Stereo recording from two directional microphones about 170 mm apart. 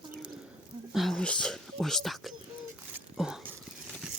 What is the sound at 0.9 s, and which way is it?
Speech, centre (ahead or behind).